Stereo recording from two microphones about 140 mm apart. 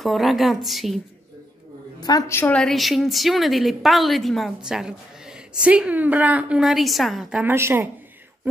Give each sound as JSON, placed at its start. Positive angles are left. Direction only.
{"t": 0.0, "sound": "a woman's voice", "side_deg": 0}
{"t": 2.0, "sound": "a woman's voice", "side_deg": 25}
{"t": 2.6, "sound": "a woman's voice", "side_deg": 0}
{"t": 7.5, "sound": "speech", "side_deg": -15}